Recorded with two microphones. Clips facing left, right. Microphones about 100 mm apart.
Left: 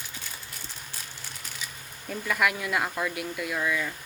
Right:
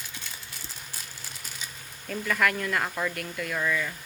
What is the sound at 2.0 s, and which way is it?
Speech, 5° left (ahead or behind).